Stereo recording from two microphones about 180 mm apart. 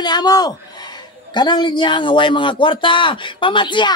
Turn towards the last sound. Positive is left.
turn(degrees=25)  # may be behind; listen again after turning